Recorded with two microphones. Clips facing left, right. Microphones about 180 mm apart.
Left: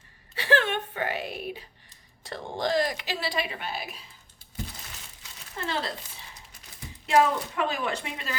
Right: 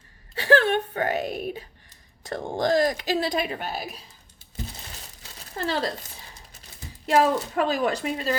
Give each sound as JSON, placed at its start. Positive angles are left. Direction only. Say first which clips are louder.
{"t": 0.3, "sound": "a sound", "louder": "right 5 dB", "side_deg": -40}
{"t": 2.2, "sound": "a woman's voice", "louder": "right 5 dB", "side_deg": -45}
{"t": 5.5, "sound": "speech", "louder": "right 5 dB", "side_deg": -40}
{"t": 7.2, "sound": "speech", "louder": "right 2 dB", "side_deg": -35}